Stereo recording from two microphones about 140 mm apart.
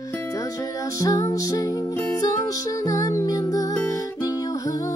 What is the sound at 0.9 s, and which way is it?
Music, 25° left (ahead or behind).